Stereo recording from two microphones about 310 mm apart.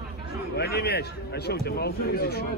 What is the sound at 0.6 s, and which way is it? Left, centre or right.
Speech, left.